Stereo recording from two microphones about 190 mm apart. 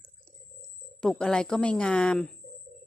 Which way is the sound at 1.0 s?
5° left (ahead or behind).